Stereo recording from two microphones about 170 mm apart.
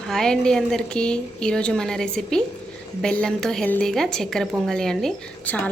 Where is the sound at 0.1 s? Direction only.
5° left (ahead or behind).